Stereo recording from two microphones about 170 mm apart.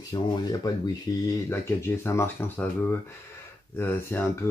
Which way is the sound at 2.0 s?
15° left (ahead or behind).